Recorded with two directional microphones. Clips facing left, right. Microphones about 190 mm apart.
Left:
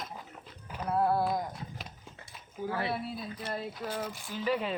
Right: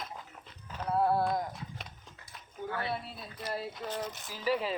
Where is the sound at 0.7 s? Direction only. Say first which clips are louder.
Even; 5° left (ahead or behind).